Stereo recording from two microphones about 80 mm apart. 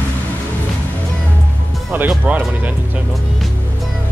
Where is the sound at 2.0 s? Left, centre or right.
Centre.